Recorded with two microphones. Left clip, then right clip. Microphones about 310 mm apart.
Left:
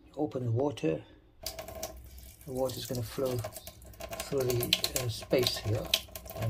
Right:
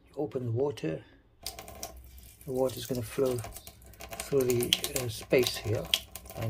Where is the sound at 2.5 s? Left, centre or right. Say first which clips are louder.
Right 3 dB; centre.